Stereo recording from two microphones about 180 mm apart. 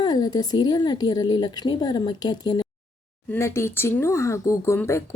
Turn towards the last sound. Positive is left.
turn(degrees=15)  # may be behind; listen again after turning